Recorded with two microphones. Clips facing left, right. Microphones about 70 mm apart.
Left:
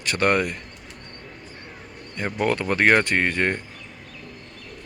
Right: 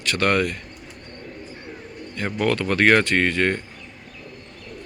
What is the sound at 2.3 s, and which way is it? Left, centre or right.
Speech, centre.